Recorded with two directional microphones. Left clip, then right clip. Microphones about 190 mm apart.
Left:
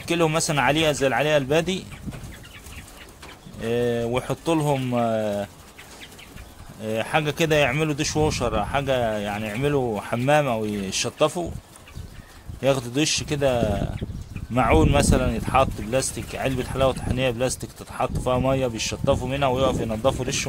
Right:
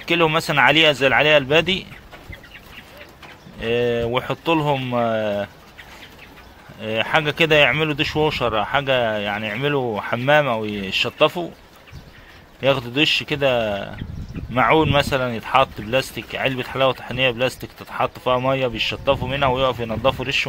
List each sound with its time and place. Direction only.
0.0 s speech: 25° left (ahead or behind)
3.6 s speech: 20° left (ahead or behind)
6.8 s speech: 20° left (ahead or behind)
12.5 s speech: 25° left (ahead or behind)